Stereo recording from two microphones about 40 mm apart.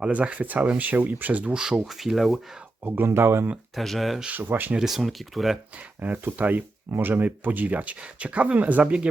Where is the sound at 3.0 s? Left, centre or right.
Right.